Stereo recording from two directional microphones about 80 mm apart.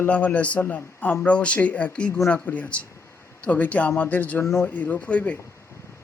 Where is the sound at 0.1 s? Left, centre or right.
Centre.